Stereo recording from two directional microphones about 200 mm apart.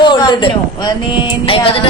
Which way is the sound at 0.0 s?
25° left (ahead or behind).